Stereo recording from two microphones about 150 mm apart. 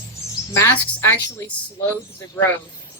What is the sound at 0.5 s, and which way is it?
Speech, 15° left (ahead or behind).